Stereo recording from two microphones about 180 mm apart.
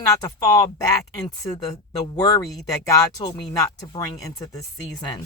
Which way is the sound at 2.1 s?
20° left (ahead or behind).